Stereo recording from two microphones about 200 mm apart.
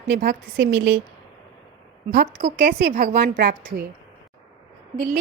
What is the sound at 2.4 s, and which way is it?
Speech, 35° right (ahead or behind).